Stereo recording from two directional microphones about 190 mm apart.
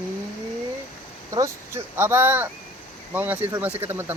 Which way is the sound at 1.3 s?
15° right (ahead or behind).